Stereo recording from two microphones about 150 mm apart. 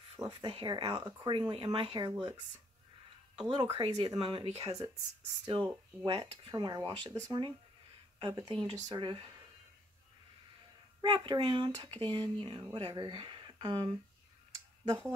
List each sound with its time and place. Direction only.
0.3 s speech: 35° right (ahead or behind)
3.3 s speech: 30° right (ahead or behind)
11.0 s speech: 30° right (ahead or behind)
14.5 s a sound: 25° right (ahead or behind)